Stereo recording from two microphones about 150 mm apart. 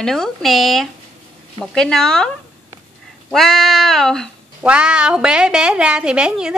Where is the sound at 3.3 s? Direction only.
Centre (ahead or behind).